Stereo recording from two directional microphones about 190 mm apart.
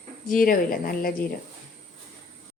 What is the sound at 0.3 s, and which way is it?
Speech, 45° left (ahead or behind).